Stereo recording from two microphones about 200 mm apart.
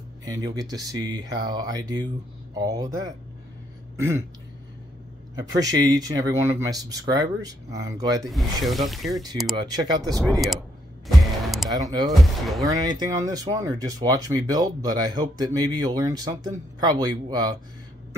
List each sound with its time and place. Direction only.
0.2 s speech: 20° right (ahead or behind)
5.6 s speech: 20° right (ahead or behind)
8.3 s speech: centre (ahead or behind)
9.8 s speech: 20° right (ahead or behind)
10.1 s speech: centre (ahead or behind)
11.1 s music: centre (ahead or behind)
11.8 s speech: 20° right (ahead or behind)
12.1 s speech: centre (ahead or behind)
12.6 s speech: 20° right (ahead or behind)